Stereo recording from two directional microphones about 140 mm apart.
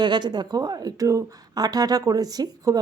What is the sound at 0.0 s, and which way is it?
A woman's voice, 30° right (ahead or behind).